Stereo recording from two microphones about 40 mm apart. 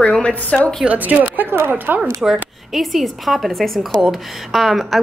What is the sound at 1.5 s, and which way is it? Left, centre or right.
Speech, right.